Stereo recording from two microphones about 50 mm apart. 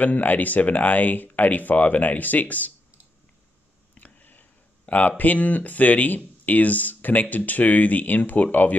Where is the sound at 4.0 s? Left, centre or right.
Left.